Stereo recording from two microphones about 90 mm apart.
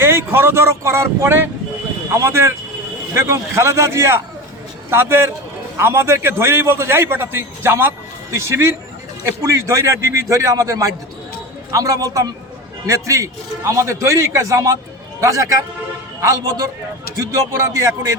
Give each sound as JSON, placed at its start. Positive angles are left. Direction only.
{"t": 0.0, "sound": "a man's voice", "side_deg": -25}